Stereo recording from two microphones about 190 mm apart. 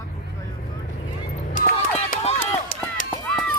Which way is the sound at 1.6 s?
40° left (ahead or behind).